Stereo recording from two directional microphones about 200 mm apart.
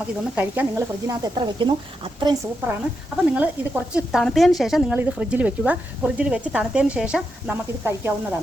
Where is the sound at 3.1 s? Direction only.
5° right (ahead or behind).